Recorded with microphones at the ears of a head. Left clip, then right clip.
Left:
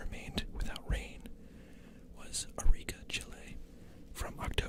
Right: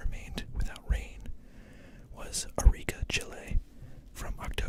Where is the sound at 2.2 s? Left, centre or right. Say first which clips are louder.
Right 7 dB; right.